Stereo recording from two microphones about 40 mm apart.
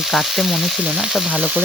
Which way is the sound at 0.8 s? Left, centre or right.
Right.